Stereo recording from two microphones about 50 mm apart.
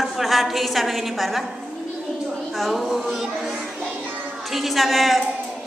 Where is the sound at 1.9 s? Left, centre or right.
Centre.